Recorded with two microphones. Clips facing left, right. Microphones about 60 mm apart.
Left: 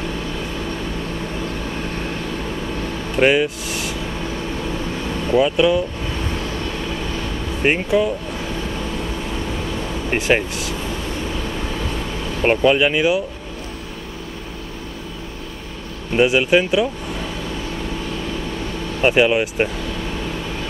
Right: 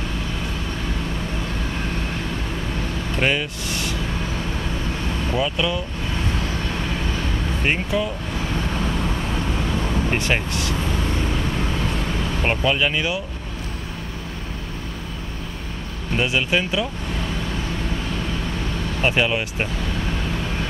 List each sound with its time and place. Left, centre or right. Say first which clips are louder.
3.2 s speech: left 7 dB; centre
5.3 s speech: left 8 dB; centre
7.6 s speech: left 6 dB; centre
10.1 s speech: left 7 dB; centre
12.4 s speech: left 6 dB; centre
16.2 s speech: left 7 dB; centre
18.9 s speech: left 6 dB; centre